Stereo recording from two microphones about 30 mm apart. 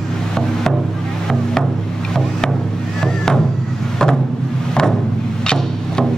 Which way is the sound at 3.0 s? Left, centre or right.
Centre.